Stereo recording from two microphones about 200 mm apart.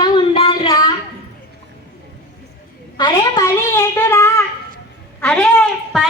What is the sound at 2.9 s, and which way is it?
A child's voice, 20° left (ahead or behind).